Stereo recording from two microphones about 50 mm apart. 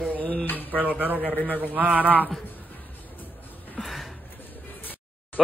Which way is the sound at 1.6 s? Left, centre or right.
Right.